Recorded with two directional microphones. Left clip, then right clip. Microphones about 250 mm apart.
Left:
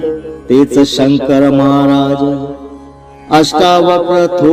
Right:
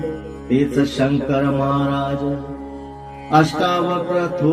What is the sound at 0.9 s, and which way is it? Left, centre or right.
Mantra, left.